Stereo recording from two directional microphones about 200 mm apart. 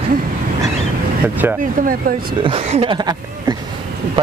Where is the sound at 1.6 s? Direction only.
45° right (ahead or behind).